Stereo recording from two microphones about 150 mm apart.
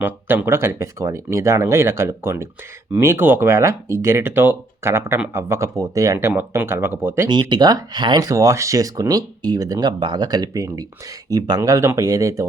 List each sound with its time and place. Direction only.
0.0 s speech: 15° right (ahead or behind)
7.3 s speech: 30° right (ahead or behind)